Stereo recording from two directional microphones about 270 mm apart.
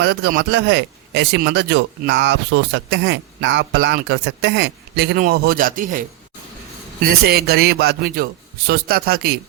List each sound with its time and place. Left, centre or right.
0.0 s speech: right